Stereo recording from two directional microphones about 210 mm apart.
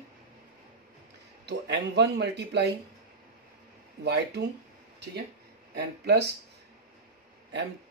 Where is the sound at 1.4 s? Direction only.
55° right (ahead or behind).